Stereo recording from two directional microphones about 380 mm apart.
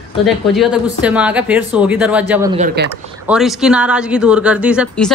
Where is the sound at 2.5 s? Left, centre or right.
Right.